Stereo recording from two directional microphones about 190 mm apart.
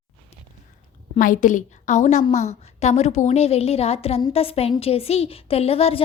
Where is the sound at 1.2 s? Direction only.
45° left (ahead or behind).